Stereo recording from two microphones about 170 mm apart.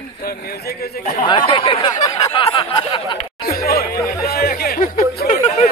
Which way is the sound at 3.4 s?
60° left (ahead or behind).